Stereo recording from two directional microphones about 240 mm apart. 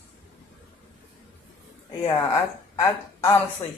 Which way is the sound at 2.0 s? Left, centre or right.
Left.